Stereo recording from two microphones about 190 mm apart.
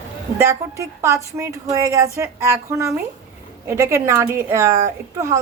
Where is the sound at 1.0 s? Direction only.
15° right (ahead or behind).